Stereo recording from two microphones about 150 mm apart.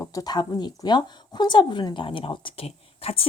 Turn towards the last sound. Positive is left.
turn(degrees=40)  # may be behind; listen again after turning